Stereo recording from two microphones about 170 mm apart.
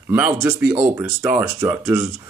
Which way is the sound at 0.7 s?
20° right (ahead or behind).